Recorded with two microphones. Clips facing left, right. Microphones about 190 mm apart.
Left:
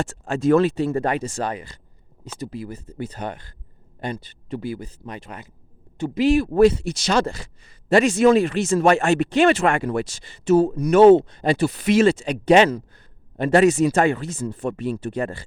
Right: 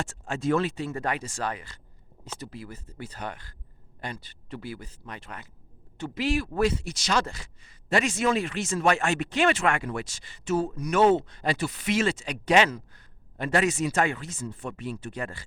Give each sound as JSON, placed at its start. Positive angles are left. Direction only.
{"t": 0.0, "sound": "speech", "side_deg": 40}